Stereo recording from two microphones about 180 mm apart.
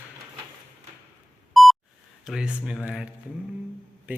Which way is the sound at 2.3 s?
5° right (ahead or behind).